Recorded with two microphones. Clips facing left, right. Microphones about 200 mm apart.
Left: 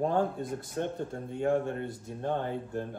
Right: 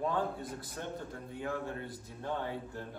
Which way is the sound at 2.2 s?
55° left (ahead or behind).